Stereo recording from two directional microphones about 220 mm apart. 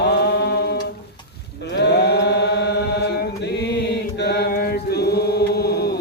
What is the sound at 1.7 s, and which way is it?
Chant, 50° left (ahead or behind).